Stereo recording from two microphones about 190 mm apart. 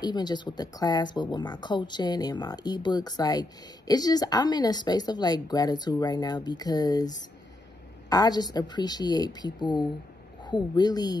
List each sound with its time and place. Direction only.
0.0 s speech: 20° left (ahead or behind)